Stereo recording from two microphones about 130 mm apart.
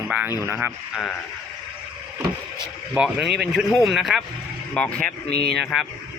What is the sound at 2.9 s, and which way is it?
Speech, 10° right (ahead or behind).